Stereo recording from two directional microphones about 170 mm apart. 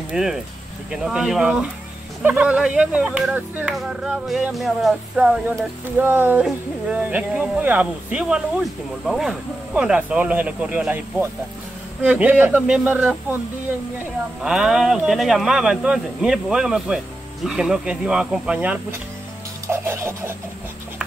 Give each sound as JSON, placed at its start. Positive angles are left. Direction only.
{"t": 0.1, "sound": "speech", "side_deg": -5}
{"t": 14.4, "sound": "speech", "side_deg": -5}